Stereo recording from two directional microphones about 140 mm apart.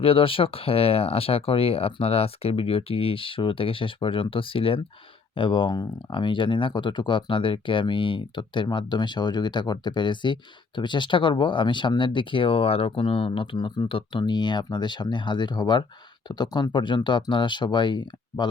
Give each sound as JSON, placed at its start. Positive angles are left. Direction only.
{"t": 0.0, "sound": "speech", "side_deg": 40}